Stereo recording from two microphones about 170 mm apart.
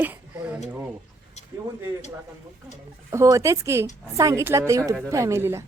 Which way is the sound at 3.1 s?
15° right (ahead or behind).